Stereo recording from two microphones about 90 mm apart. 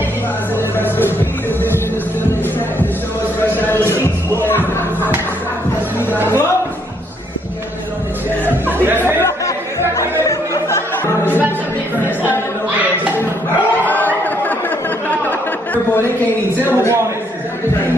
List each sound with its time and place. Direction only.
0.7 s music: 25° left (ahead or behind)
3.4 s music: 25° left (ahead or behind)
6.2 s music: 25° left (ahead or behind)
8.7 s music: 25° right (ahead or behind)
9.9 s music: 35° left (ahead or behind)
13.8 s a sound: 20° left (ahead or behind)
15.0 s chatter: 20° left (ahead or behind)
16.6 s a sound: 30° right (ahead or behind)